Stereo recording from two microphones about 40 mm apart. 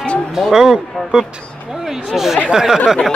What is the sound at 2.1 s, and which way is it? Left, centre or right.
Speech, centre.